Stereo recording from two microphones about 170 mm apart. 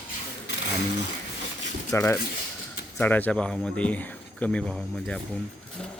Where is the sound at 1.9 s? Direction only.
15° left (ahead or behind).